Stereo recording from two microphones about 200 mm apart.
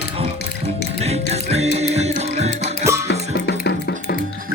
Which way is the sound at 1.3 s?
30° right (ahead or behind).